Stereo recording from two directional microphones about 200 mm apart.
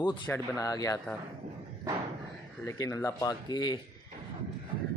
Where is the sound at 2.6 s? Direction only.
15° left (ahead or behind).